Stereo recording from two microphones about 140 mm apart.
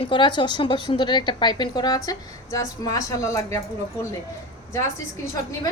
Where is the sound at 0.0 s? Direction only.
35° left (ahead or behind); by 4.0 s 20° left (ahead or behind).